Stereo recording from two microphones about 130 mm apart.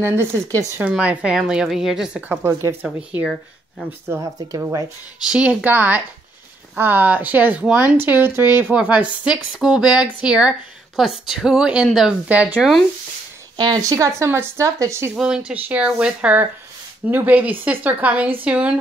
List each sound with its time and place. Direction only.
0.0 s speech: 20° right (ahead or behind)
0.7 s speech: 10° right (ahead or behind)
2.2 s speech: 15° right (ahead or behind)
4.1 s speech: 25° right (ahead or behind)
5.3 s speech: 10° right (ahead or behind)
13.6 s speech: 30° right (ahead or behind)
15.1 s speech: 5° right (ahead or behind)